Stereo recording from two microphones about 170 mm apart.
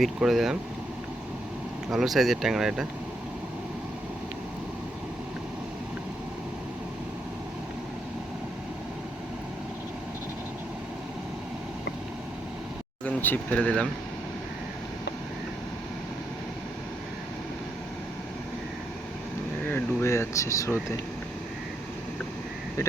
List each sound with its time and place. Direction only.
0.0 s speech: centre (ahead or behind)
1.9 s speech: centre (ahead or behind)
13.1 s speech: 10° left (ahead or behind)
19.7 s speech: 15° left (ahead or behind)